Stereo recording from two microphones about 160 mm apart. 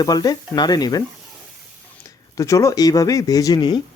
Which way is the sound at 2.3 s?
20° left (ahead or behind).